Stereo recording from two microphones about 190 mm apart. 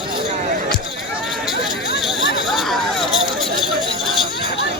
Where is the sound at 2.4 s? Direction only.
Centre (ahead or behind).